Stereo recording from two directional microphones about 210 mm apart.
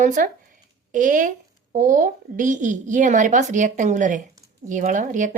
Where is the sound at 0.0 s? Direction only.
40° right (ahead or behind).